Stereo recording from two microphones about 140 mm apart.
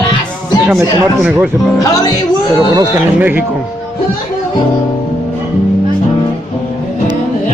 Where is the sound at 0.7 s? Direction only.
15° right (ahead or behind).